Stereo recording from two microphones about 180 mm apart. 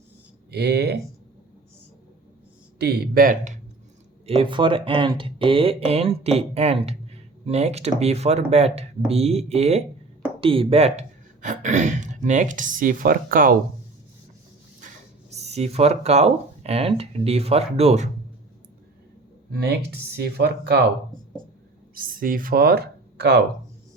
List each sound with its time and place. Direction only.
0.5 s speech: 65° right (ahead or behind)
2.7 s speech: 65° right (ahead or behind); by 3.6 s 45° right (ahead or behind)
4.3 s speech: 30° right (ahead or behind); by 13.6 s 50° right (ahead or behind)
14.8 s speech: 40° right (ahead or behind)
19.5 s speech: 65° right (ahead or behind)
21.9 s speech: 50° right (ahead or behind)